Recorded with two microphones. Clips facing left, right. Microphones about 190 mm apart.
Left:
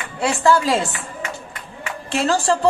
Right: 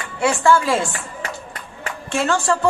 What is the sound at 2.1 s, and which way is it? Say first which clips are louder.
Speech: left 1 dB; 35° left (ahead or behind).